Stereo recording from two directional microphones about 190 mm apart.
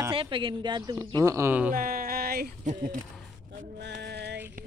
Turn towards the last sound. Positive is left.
turn(degrees=-60)  # may be behind; listen again after turning